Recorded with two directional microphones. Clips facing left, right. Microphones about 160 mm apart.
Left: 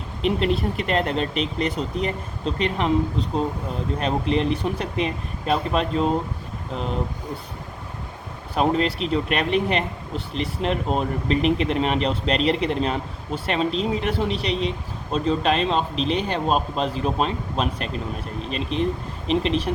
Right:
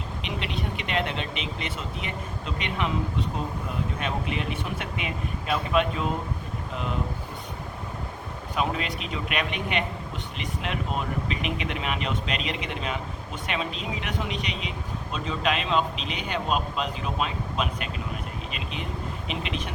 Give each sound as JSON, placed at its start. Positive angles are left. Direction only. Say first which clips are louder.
{"t": 0.2, "sound": "speech", "louder": "left 12 dB", "side_deg": 40}
{"t": 8.5, "sound": "speech", "louder": "left 8 dB", "side_deg": 35}
{"t": 19.3, "sound": "speech", "louder": "left 12 dB", "side_deg": 35}